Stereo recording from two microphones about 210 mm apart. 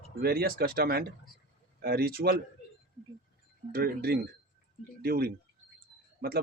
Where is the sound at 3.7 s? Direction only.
45° right (ahead or behind).